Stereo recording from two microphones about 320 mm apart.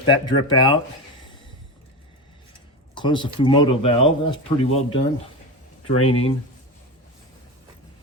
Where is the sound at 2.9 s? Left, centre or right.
Centre.